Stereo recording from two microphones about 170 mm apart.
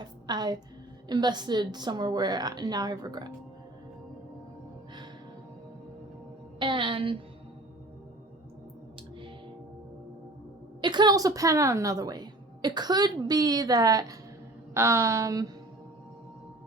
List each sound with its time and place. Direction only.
0.0 s a woman's voice: 25° right (ahead or behind)
6.6 s a woman's voice: 30° right (ahead or behind)
10.8 s a woman's voice: 25° right (ahead or behind)